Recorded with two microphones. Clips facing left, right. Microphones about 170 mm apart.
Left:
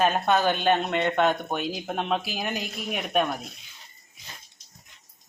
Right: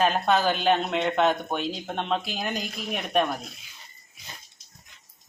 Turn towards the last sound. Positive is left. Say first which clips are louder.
# even
turn(degrees=0)  # may be behind; listen again after turning